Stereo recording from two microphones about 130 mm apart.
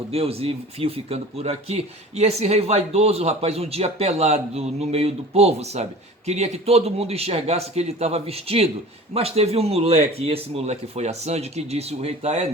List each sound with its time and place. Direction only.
0.1 s speech: 50° right (ahead or behind)